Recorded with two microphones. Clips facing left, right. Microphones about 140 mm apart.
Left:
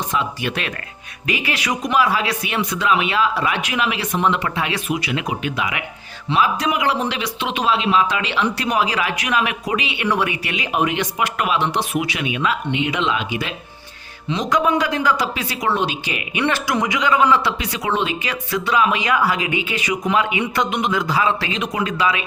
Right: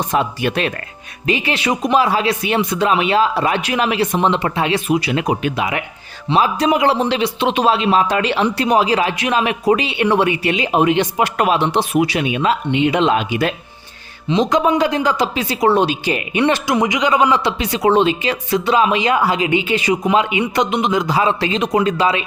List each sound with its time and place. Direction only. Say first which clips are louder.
0.1 s speech: right 5 dB; 45° right (ahead or behind)
1.3 s speech: right 5 dB; 30° right (ahead or behind)
8.5 s speech: right 5 dB; 30° right (ahead or behind); by 13.5 s 45° right (ahead or behind)
14.3 s speech: right 4 dB; 25° right (ahead or behind)
16.4 s speech: right 4 dB; 20° right (ahead or behind)
17.8 s speech: right 8 dB; 30° right (ahead or behind)